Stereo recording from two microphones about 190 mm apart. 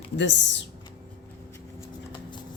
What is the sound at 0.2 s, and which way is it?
Speech, 70° left (ahead or behind).